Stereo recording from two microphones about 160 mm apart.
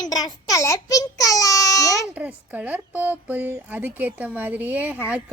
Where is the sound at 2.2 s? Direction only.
10° right (ahead or behind).